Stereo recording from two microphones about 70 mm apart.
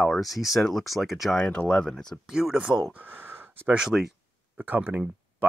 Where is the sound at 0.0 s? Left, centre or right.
Centre.